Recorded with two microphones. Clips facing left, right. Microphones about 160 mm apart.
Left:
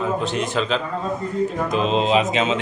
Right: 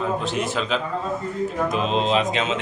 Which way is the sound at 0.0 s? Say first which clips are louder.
Left 1 dB; centre (ahead or behind).